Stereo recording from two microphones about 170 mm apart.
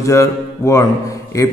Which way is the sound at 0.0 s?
15° left (ahead or behind).